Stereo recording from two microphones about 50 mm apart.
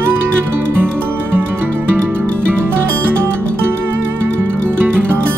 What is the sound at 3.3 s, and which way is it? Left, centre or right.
Music, right.